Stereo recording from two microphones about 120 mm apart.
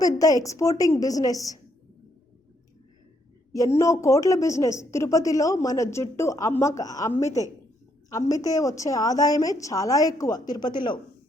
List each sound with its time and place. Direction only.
0.0 s a woman's voice: 30° left (ahead or behind)
3.8 s a woman's voice: 25° left (ahead or behind)